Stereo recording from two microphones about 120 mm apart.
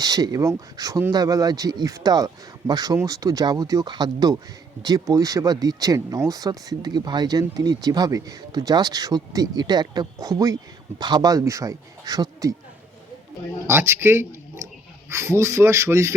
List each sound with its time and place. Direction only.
0.0 s speech: 30° right (ahead or behind)
13.7 s speech: 20° right (ahead or behind)